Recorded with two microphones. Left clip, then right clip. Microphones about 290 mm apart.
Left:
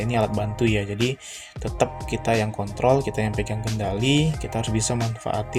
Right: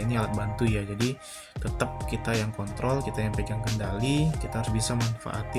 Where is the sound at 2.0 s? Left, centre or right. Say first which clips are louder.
Left 7 dB; right.